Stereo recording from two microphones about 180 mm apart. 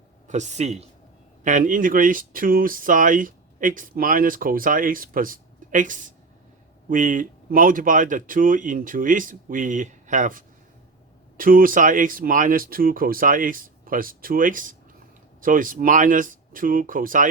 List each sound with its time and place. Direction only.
0.3 s speech: 40° right (ahead or behind)